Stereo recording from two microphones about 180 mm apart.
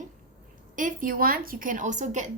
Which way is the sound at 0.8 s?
50° right (ahead or behind).